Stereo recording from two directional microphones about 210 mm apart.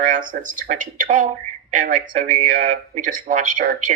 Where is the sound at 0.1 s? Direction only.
40° right (ahead or behind).